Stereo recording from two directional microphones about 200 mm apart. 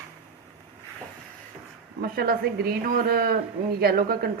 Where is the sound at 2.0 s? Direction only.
50° right (ahead or behind).